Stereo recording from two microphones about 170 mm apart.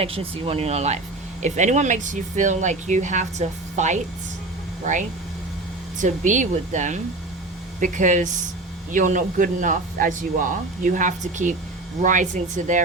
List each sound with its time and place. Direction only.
0.0 s speech: 35° right (ahead or behind)